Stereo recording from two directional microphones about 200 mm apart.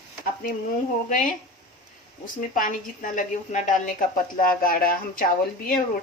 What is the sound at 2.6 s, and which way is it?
A woman's voice, 40° left (ahead or behind).